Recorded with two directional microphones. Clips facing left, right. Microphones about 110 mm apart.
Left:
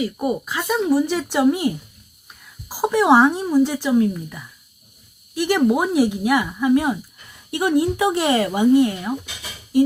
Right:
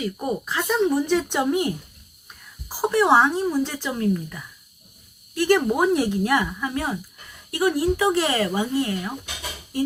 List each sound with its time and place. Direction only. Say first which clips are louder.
0.0 s speech: left 4 dB; 5° left (ahead or behind)